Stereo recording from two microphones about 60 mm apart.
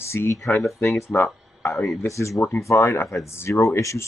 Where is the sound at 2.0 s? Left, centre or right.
Left.